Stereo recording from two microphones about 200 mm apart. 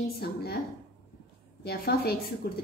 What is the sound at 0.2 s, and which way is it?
Speech, 50° left (ahead or behind).